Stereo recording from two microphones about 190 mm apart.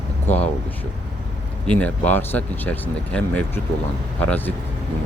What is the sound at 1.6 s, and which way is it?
Speech, 5° left (ahead or behind).